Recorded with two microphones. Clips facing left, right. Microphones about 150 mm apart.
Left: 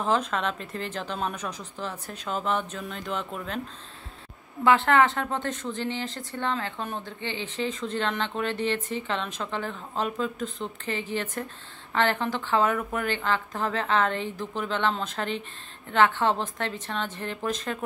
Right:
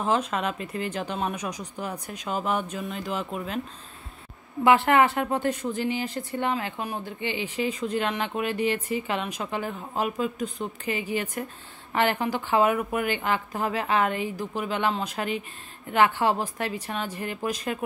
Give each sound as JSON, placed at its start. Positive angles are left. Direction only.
{"t": 0.0, "sound": "speech", "side_deg": -5}
{"t": 4.6, "sound": "speech", "side_deg": -15}